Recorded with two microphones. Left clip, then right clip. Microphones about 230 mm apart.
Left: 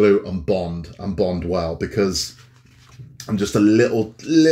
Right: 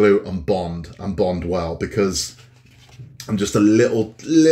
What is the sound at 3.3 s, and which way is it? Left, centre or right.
Speech, centre.